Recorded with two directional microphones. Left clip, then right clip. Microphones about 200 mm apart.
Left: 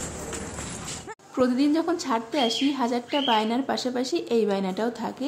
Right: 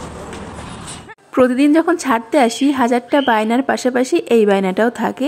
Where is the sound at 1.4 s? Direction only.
35° right (ahead or behind).